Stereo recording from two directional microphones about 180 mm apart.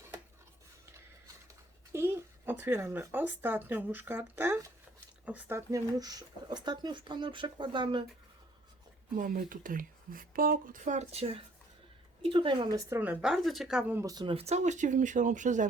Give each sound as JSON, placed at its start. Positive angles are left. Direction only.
{"t": 1.9, "sound": "speech", "side_deg": -15}
{"t": 9.1, "sound": "speech", "side_deg": -45}
{"t": 12.7, "sound": "a woman's voice", "side_deg": -10}
{"t": 14.0, "sound": "speech", "side_deg": -20}